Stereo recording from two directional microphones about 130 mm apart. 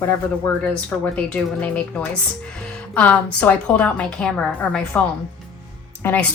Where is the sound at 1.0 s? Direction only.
10° left (ahead or behind).